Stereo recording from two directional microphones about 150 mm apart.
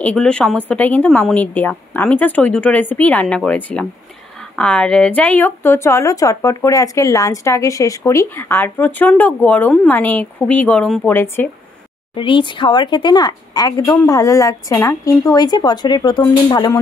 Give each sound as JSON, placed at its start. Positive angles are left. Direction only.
{"t": 0.0, "sound": "speech", "side_deg": 5}
{"t": 12.2, "sound": "speech", "side_deg": 35}